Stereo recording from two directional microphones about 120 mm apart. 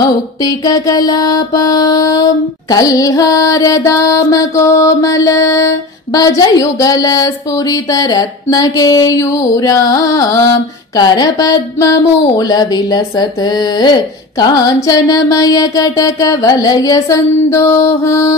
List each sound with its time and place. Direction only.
0.4 s mantra: 30° left (ahead or behind)
11.0 s speech: 35° left (ahead or behind)
14.4 s mantra: 35° left (ahead or behind)